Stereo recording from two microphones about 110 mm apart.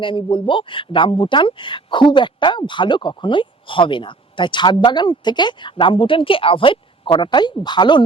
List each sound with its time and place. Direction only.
0.0 s speech: 50° left (ahead or behind)